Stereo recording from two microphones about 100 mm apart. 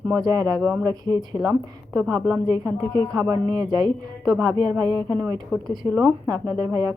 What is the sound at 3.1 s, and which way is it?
A woman's voice, 40° right (ahead or behind).